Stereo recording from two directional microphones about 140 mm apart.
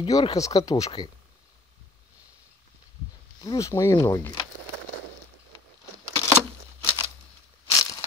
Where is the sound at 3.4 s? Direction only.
25° left (ahead or behind).